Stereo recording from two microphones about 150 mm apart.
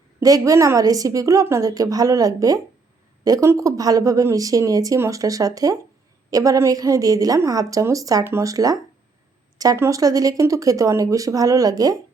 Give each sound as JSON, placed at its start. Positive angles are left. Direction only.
{"t": 0.2, "sound": "speech", "side_deg": -25}